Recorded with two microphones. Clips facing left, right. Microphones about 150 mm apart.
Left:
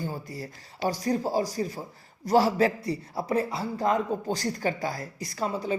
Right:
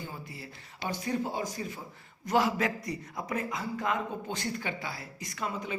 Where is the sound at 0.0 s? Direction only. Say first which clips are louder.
Left 8 dB; 40° left (ahead or behind).